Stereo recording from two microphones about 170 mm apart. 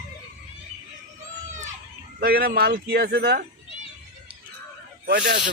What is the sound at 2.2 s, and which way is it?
Speech, 65° right (ahead or behind).